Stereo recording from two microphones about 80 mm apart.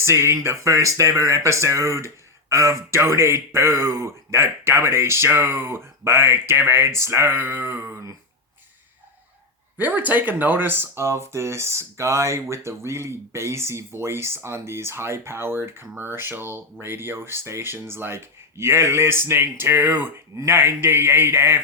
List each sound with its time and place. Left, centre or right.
0.0 s speech: right
9.7 s speech: right